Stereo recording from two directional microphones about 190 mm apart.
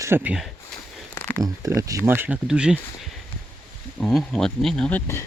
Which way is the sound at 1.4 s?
15° right (ahead or behind).